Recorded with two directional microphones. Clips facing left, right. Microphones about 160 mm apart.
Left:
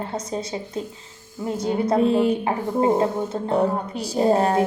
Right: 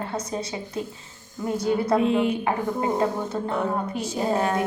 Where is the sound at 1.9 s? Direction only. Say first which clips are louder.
Left 5 dB; 35° left (ahead or behind).